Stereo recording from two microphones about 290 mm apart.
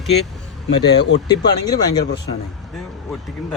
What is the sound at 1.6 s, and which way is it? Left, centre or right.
Speech, centre.